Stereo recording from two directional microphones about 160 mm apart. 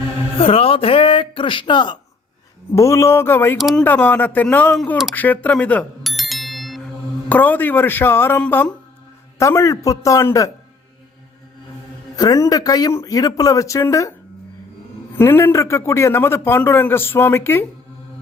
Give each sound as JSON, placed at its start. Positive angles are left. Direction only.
{"t": 0.3, "sound": "speech", "side_deg": 35}
{"t": 2.7, "sound": "a man's voice", "side_deg": 20}
{"t": 3.6, "sound": "speech", "side_deg": 0}
{"t": 3.8, "sound": "a man's voice", "side_deg": 10}
{"t": 5.1, "sound": "bicycle bell", "side_deg": 10}
{"t": 7.3, "sound": "a man's voice", "side_deg": 10}
{"t": 12.1, "sound": "speech", "side_deg": 25}
{"t": 15.2, "sound": "a man's voice", "side_deg": 15}